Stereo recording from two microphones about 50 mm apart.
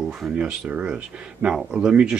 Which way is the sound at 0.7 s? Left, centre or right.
Right.